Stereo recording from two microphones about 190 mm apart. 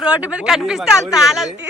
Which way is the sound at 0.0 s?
5° right (ahead or behind).